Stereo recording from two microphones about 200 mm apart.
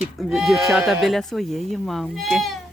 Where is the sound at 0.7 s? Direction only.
5° right (ahead or behind).